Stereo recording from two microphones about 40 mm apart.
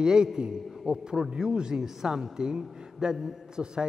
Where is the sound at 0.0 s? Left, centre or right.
Centre.